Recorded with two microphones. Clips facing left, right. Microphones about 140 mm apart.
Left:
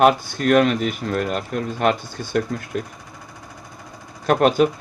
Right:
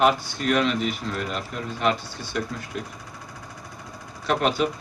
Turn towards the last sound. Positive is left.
turn(degrees=45)  # may be behind; listen again after turning